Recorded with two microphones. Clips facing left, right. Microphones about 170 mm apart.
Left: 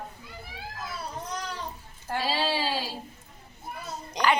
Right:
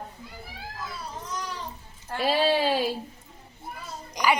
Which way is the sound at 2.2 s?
55° right (ahead or behind).